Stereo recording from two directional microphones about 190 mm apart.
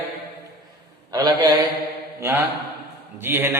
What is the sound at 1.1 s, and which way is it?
Speech, 20° right (ahead or behind).